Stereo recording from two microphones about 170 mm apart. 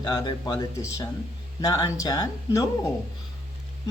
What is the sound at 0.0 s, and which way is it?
Speech, 20° left (ahead or behind).